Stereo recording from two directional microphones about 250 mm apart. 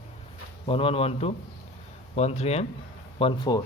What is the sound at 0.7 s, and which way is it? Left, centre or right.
Speech, left.